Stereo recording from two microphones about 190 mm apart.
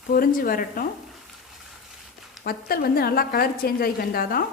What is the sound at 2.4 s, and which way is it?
A woman's voice, 50° left (ahead or behind).